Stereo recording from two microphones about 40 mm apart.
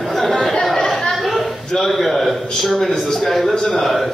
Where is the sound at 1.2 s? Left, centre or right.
Centre.